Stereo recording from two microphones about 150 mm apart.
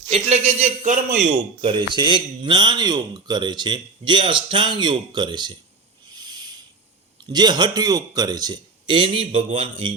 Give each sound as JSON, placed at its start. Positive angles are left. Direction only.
{"t": 0.1, "sound": "speech", "side_deg": -45}
{"t": 1.6, "sound": "a man's voice", "side_deg": -30}
{"t": 6.1, "sound": "owl", "side_deg": -30}
{"t": 7.3, "sound": "a man's voice", "side_deg": -30}